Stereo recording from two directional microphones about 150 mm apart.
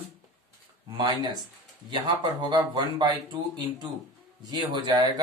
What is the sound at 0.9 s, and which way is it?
Speech, 30° right (ahead or behind).